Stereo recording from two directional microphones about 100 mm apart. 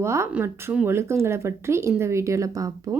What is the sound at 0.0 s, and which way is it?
A woman's voice, 25° right (ahead or behind).